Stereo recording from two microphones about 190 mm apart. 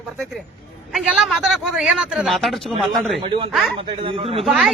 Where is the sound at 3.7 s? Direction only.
30° right (ahead or behind).